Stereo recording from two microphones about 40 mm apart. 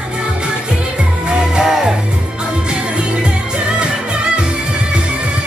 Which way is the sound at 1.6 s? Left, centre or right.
Centre.